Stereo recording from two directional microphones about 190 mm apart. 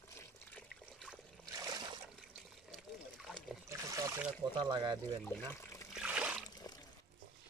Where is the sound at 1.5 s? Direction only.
20° right (ahead or behind).